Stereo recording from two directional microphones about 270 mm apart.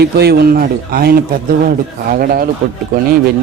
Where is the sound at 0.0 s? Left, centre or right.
Right.